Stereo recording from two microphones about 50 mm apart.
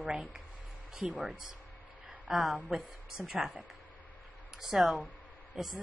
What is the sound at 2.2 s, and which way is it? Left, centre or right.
Speech, centre.